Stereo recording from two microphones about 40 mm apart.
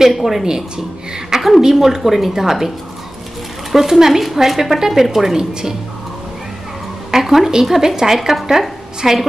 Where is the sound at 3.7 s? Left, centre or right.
Centre.